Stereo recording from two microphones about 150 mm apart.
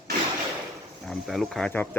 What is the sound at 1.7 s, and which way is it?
Speech, 15° left (ahead or behind).